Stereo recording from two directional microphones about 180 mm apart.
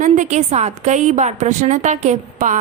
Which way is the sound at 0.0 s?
40° right (ahead or behind).